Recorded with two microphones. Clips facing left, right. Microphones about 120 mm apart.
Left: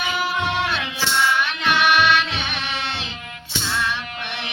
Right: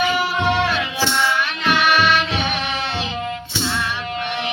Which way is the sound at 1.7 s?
45° right (ahead or behind).